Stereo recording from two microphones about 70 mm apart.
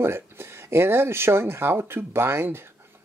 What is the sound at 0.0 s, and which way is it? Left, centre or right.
Speech, right.